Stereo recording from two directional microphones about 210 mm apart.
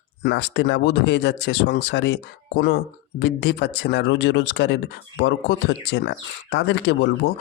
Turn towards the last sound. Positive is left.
turn(degrees=60)  # may be behind; listen again after turning